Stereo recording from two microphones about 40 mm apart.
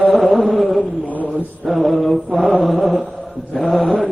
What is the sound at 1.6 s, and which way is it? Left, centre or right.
Mantra, centre.